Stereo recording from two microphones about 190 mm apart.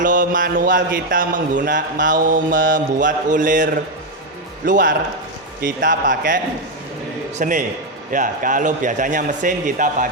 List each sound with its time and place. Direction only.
0.0 s a man's voice: 45° right (ahead or behind)